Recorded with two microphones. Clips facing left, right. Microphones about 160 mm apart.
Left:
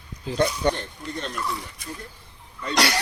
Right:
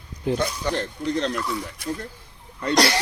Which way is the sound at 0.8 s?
90° right.